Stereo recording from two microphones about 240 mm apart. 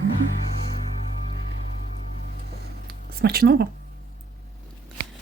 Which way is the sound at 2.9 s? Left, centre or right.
Right.